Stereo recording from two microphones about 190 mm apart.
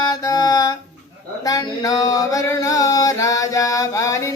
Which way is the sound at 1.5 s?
20° left (ahead or behind).